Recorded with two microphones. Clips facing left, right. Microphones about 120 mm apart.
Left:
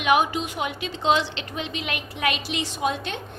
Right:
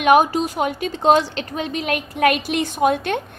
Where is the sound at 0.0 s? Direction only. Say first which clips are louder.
Right 6 dB; 45° right (ahead or behind).